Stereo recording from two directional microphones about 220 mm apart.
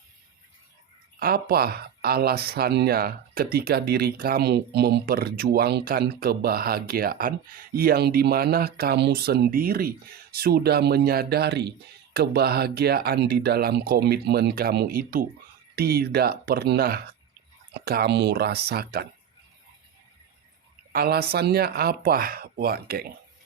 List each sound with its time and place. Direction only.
1.2 s speech: 45° right (ahead or behind)
20.9 s speech: 45° right (ahead or behind)